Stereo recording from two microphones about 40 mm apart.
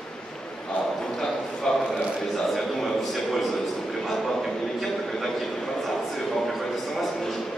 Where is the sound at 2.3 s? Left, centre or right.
Centre.